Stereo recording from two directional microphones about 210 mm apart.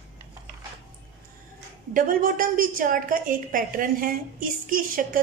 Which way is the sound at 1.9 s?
40° right (ahead or behind).